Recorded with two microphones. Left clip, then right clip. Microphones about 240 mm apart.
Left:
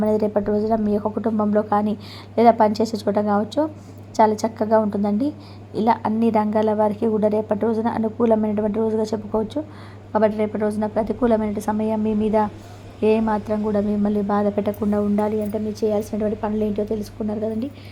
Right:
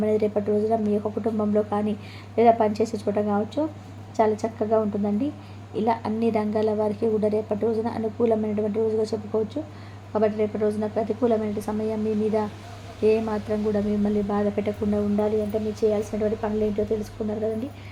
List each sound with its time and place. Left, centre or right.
0.0 s a woman's voice: centre